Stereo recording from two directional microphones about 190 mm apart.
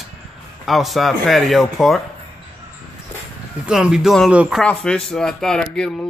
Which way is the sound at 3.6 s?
5° right (ahead or behind).